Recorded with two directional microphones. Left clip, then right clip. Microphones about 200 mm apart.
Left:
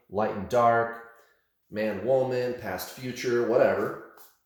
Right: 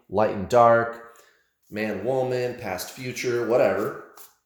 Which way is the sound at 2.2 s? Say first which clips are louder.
Right 2 dB; 35° right (ahead or behind).